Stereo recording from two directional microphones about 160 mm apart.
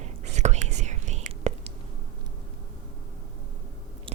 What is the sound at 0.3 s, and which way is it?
Whispering, 45° right (ahead or behind).